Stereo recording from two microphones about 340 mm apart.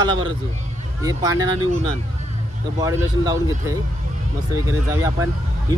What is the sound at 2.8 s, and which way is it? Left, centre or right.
A man's voice, centre.